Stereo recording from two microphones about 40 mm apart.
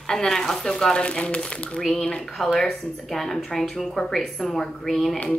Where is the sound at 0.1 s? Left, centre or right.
Centre.